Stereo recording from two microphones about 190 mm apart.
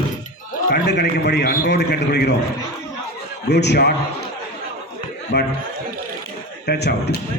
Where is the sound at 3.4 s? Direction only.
60° left (ahead or behind).